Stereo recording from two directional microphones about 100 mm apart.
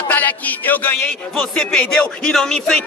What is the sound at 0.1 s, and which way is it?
Speech, 20° left (ahead or behind).